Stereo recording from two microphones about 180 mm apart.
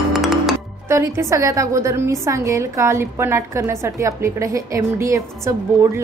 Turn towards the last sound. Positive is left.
turn(degrees=-15)  # may be behind; listen again after turning